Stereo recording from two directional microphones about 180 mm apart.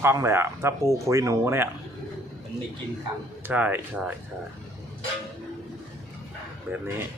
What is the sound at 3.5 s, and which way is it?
Speech, 10° right (ahead or behind).